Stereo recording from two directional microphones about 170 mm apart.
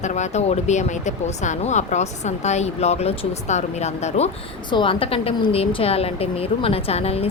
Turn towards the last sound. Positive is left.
turn(degrees=35)  # may be behind; listen again after turning